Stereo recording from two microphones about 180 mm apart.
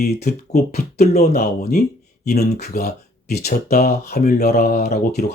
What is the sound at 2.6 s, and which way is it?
Speech, 60° left (ahead or behind).